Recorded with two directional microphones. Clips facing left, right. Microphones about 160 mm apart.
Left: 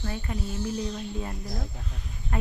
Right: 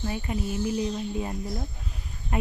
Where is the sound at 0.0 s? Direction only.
15° right (ahead or behind).